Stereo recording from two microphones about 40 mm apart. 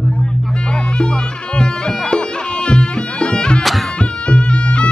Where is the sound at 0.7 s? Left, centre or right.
Left.